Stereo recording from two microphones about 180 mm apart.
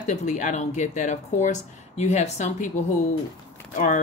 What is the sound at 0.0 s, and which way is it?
Speech, 40° left (ahead or behind).